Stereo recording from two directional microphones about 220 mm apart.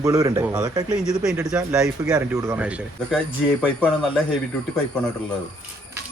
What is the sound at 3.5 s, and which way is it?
Speech, 5° left (ahead or behind).